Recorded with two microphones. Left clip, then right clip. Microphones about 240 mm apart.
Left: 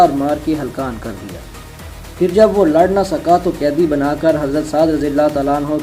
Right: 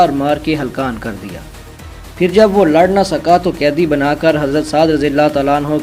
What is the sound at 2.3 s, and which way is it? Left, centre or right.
Speech, right.